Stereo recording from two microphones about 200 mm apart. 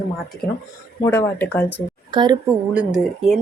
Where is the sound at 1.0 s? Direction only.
10° left (ahead or behind).